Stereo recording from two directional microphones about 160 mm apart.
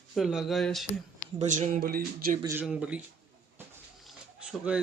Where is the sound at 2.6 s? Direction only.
5° right (ahead or behind).